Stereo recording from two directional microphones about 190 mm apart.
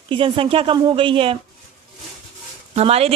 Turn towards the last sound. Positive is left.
turn(degrees=-30)  # may be behind; listen again after turning